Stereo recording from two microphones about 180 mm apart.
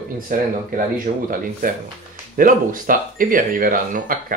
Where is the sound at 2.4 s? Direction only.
50° right (ahead or behind).